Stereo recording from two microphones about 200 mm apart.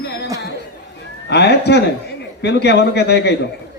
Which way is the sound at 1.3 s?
55° left (ahead or behind).